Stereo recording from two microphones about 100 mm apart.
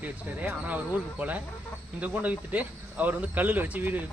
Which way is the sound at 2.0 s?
15° right (ahead or behind).